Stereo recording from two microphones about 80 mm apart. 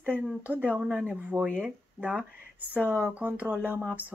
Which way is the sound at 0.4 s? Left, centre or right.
Centre.